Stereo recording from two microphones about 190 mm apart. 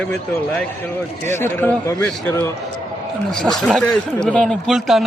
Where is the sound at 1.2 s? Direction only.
10° left (ahead or behind).